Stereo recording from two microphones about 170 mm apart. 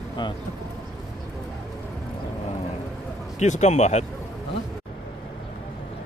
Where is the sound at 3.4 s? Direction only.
45° left (ahead or behind).